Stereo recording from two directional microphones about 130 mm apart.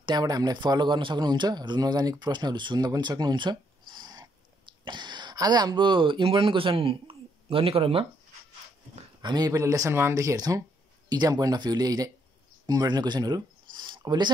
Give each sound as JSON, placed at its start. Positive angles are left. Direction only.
{"t": 0.0, "sound": "a man's voice", "side_deg": -30}
{"t": 9.2, "sound": "a man's voice", "side_deg": -30}